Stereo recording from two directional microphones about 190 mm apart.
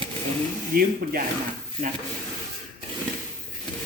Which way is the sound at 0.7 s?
50° right (ahead or behind).